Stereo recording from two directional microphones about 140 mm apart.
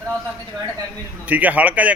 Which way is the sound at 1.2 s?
10° right (ahead or behind).